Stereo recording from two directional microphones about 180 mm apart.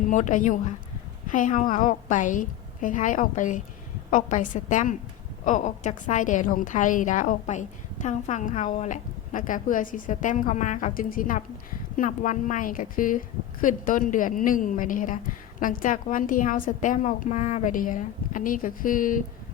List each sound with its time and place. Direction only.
0.1 s a woman's voice: 45° left (ahead or behind)